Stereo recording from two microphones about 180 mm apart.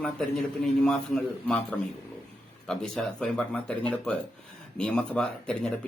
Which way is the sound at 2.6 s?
5° left (ahead or behind).